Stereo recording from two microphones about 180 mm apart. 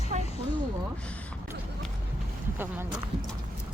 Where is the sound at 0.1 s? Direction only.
40° right (ahead or behind).